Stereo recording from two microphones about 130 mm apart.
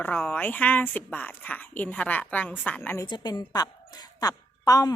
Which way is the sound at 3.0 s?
35° left (ahead or behind).